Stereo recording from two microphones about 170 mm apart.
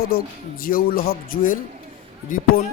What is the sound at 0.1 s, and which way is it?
A man's voice, 60° left (ahead or behind).